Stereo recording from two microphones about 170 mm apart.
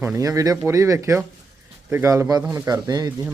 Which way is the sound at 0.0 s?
15° right (ahead or behind).